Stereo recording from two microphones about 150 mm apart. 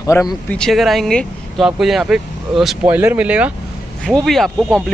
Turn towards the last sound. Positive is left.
turn(degrees=0)  # may be behind; listen again after turning